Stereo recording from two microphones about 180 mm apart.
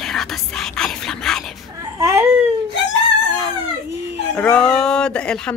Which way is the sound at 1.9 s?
15° right (ahead or behind).